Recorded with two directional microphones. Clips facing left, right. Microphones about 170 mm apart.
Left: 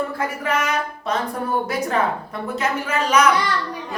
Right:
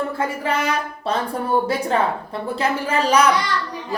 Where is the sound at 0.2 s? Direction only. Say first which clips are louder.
Right 1 dB; 30° right (ahead or behind).